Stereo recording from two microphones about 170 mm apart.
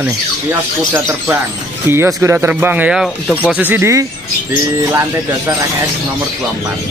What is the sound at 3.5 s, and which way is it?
Speech, 10° right (ahead or behind).